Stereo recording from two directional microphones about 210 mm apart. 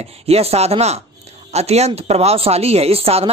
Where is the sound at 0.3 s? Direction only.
30° right (ahead or behind).